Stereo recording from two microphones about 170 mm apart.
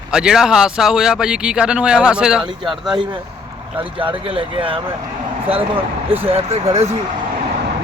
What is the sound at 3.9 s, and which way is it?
Speech, 30° right (ahead or behind).